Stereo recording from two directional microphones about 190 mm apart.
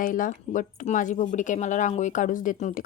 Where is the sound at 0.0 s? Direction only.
45° left (ahead or behind).